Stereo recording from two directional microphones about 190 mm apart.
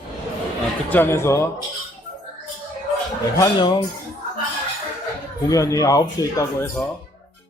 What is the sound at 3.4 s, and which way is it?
Speech, 25° left (ahead or behind).